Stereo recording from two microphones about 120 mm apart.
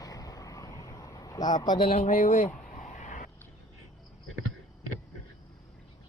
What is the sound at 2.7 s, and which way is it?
Vehicle, 90° left.